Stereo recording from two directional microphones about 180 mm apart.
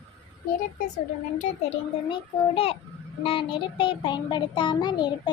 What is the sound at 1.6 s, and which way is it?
A child's voice, 30° left (ahead or behind).